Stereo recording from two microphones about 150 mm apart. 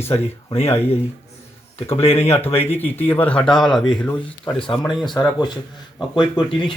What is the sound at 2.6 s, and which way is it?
A man's voice, 15° left (ahead or behind).